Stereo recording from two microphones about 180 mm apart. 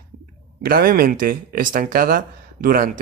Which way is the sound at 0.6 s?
55° right (ahead or behind).